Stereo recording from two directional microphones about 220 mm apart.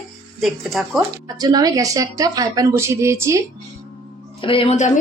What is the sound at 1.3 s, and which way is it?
A woman's voice, 20° right (ahead or behind).